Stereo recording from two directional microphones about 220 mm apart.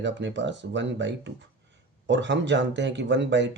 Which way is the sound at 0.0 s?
55° right (ahead or behind).